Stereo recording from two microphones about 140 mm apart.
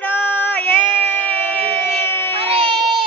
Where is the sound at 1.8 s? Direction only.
15° left (ahead or behind).